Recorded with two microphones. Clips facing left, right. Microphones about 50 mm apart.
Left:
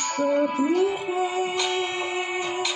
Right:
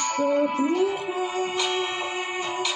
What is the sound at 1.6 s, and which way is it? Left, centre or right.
Music, centre.